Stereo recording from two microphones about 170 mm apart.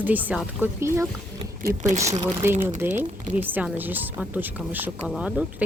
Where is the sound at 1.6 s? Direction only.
45° right (ahead or behind).